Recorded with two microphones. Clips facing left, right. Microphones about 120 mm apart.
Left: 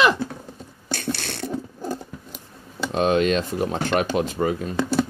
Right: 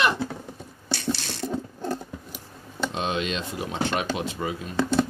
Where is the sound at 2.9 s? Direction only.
45° left (ahead or behind).